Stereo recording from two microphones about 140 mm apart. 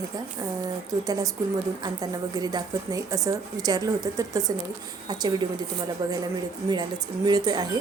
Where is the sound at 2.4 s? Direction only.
30° right (ahead or behind).